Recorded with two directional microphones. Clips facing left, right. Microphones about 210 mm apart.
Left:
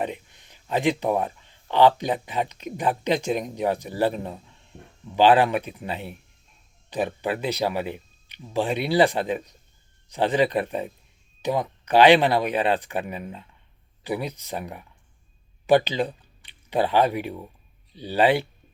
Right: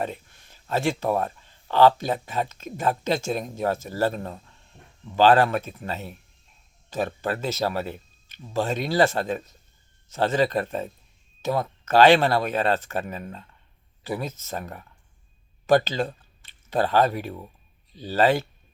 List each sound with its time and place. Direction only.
0.0 s speech: 15° left (ahead or behind)